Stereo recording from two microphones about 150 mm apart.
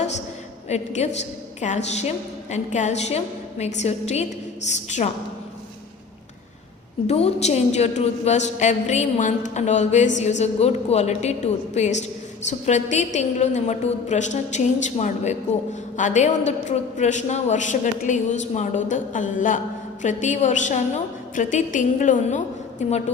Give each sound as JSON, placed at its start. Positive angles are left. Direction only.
{"t": 0.7, "sound": "a woman's voice", "side_deg": 50}
{"t": 7.1, "sound": "a woman's voice", "side_deg": 45}